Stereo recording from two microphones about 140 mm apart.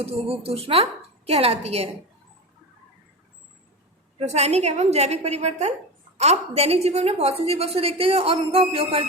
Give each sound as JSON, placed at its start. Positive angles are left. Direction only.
{"t": 0.0, "sound": "a woman's voice", "side_deg": -45}
{"t": 4.2, "sound": "a woman's voice", "side_deg": -50}